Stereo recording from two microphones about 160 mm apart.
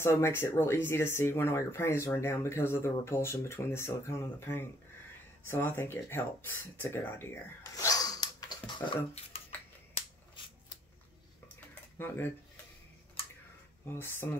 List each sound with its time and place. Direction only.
0.0 s speech: 15° left (ahead or behind)
12.0 s speech: 10° left (ahead or behind)
13.8 s speech: 15° left (ahead or behind)